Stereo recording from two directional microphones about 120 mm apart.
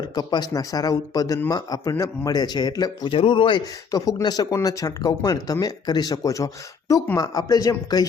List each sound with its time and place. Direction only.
0.0 s speech: 35° left (ahead or behind)
3.1 s speech: 50° left (ahead or behind)
3.9 s speech: 35° left (ahead or behind)